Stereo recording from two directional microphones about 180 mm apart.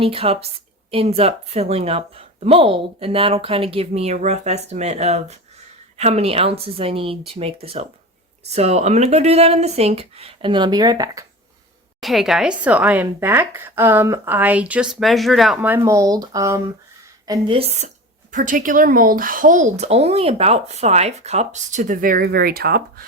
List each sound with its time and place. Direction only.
0.0 s a woman's voice: 30° right (ahead or behind)
11.9 s speech: centre (ahead or behind)
15.9 s a woman's voice: 20° right (ahead or behind); by 23.0 s 60° right (ahead or behind)